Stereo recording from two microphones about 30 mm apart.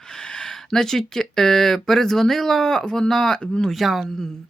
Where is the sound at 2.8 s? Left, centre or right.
Left.